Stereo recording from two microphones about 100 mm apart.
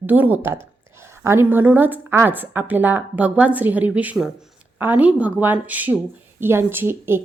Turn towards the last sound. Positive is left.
turn(degrees=-25)  # may be behind; listen again after turning